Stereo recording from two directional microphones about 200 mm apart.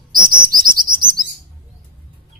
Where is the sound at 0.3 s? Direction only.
45° right (ahead or behind).